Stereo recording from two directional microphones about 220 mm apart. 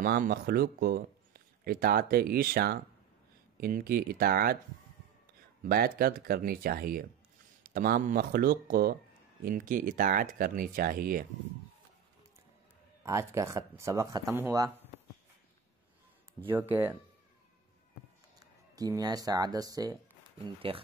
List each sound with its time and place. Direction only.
0.0 s speech: 40° right (ahead or behind)
5.6 s speech: 40° right (ahead or behind)
13.0 s speech: 15° right (ahead or behind)
16.3 s speech: 10° right (ahead or behind)
18.8 s speech: 15° right (ahead or behind)